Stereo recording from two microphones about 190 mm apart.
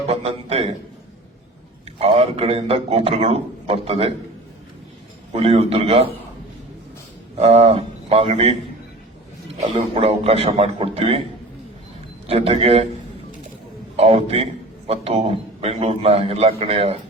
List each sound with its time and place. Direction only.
0.1 s a sound: 30° right (ahead or behind)
2.0 s a man's voice: 30° right (ahead or behind)
5.3 s a man's voice: 30° right (ahead or behind)
7.3 s a man's voice: 35° right (ahead or behind)
9.7 s a man's voice: 30° right (ahead or behind)
12.3 s a man's voice: 30° right (ahead or behind)
13.9 s a man's voice: 30° right (ahead or behind)